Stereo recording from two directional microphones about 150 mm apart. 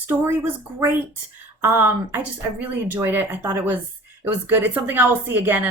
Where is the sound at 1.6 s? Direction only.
15° right (ahead or behind).